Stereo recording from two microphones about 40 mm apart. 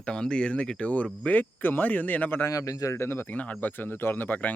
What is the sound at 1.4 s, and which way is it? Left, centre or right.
Speech, left.